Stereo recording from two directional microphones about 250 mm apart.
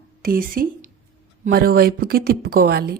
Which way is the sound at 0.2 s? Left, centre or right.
Right.